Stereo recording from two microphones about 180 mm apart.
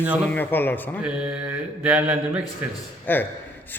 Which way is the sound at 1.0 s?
5° right (ahead or behind).